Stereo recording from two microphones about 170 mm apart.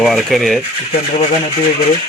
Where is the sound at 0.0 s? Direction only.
Centre (ahead or behind).